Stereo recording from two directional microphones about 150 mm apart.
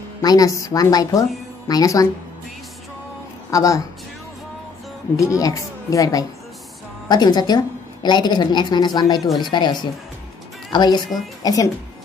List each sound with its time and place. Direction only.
0.2 s a woman's voice: 25° left (ahead or behind)
3.4 s a woman's voice: 20° left (ahead or behind)
5.1 s a woman's voice: 20° left (ahead or behind)